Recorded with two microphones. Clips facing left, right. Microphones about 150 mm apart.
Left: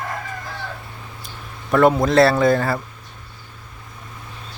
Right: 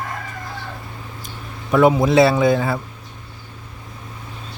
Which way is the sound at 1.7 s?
5° right (ahead or behind).